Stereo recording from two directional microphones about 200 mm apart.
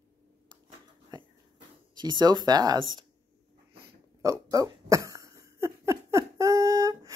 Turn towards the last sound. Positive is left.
turn(degrees=-15)  # may be behind; listen again after turning